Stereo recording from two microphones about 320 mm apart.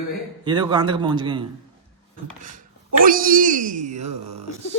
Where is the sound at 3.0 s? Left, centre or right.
Right.